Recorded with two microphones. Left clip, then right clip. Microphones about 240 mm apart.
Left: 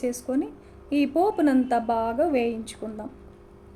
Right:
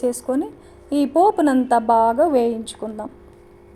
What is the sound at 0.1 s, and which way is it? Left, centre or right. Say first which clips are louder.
A woman's voice: right 5 dB; centre.